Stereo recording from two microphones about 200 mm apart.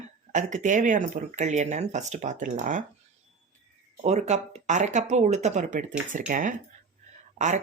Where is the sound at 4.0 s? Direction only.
35° right (ahead or behind).